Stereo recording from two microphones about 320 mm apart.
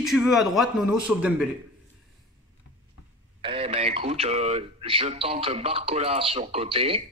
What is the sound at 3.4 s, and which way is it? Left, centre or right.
A man's voice, centre.